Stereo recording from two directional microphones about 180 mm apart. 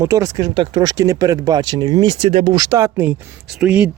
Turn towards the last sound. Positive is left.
turn(degrees=-5)  # may be behind; listen again after turning